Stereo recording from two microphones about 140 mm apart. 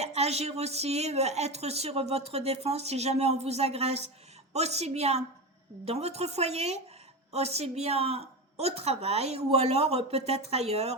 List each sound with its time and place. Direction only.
0.0 s speech: 50° right (ahead or behind)